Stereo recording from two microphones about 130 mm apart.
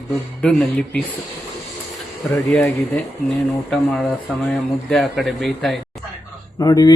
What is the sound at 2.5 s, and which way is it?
A man's voice, 10° left (ahead or behind).